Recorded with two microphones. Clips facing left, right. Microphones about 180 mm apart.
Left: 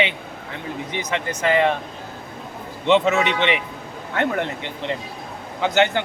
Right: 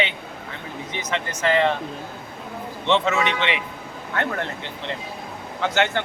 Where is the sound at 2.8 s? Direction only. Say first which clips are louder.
Left 4 dB; 15° left (ahead or behind).